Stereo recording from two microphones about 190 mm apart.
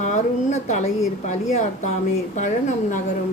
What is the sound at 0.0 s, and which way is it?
A woman's voice, 40° left (ahead or behind).